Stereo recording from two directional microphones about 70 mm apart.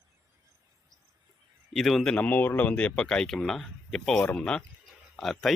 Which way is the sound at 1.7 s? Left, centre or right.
Centre.